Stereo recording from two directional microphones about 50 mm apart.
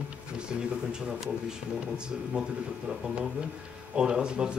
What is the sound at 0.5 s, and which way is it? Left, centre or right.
Speech, centre.